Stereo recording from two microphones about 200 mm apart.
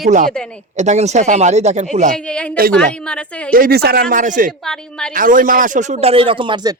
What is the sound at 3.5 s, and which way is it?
Speech, 45° right (ahead or behind).